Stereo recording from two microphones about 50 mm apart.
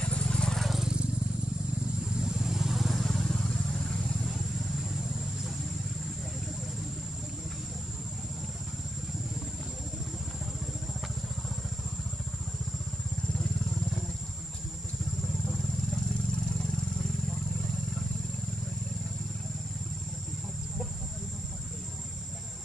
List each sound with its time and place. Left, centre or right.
0.0 s vehicle: left
0.7 s vehicle: centre
2.1 s vehicle: centre